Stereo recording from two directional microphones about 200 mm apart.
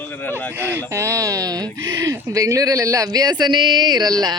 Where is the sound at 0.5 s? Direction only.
10° right (ahead or behind).